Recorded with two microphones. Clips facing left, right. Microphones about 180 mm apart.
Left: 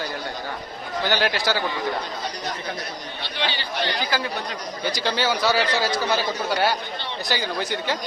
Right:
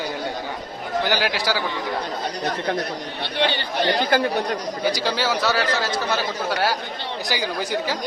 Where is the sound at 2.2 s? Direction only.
60° right (ahead or behind).